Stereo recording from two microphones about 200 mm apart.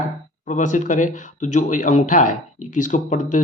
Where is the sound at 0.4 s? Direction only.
40° left (ahead or behind).